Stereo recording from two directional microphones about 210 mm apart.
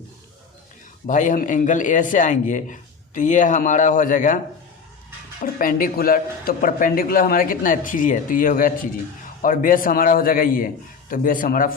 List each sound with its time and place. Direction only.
1.0 s a man's voice: 35° left (ahead or behind)
5.4 s a man's voice: 40° left (ahead or behind)